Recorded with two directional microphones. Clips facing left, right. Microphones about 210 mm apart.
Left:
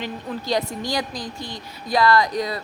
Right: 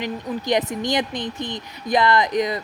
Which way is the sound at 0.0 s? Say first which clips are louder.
Right 3 dB; 20° right (ahead or behind).